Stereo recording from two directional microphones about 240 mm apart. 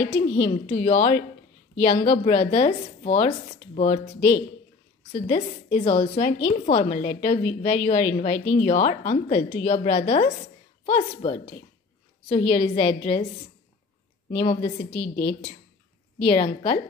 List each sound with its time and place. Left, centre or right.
0.2 s a woman's voice: left
5.1 s a woman's voice: left
14.4 s a woman's voice: left
15.0 s a woman's voice: left
16.3 s a woman's voice: left